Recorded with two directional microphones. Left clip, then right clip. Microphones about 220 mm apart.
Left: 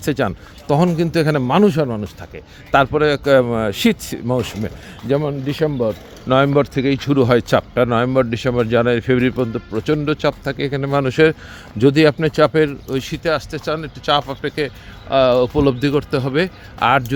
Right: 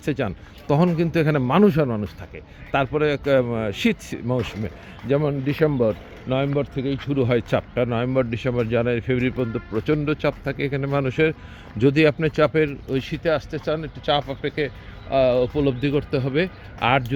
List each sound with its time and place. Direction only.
0.0 s speech: 20° left (ahead or behind)
2.3 s speech: 20° left (ahead or behind)
5.2 s speech: centre (ahead or behind)
6.2 s speech: 35° left (ahead or behind); by 7.2 s 50° left (ahead or behind)
7.2 s speech: 25° left (ahead or behind)
15.1 s speech: 25° left (ahead or behind)